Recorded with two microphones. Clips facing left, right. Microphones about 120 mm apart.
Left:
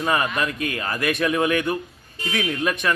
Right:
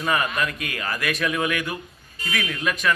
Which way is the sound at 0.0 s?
25° left (ahead or behind).